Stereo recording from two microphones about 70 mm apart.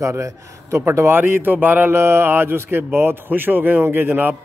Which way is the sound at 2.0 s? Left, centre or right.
Right.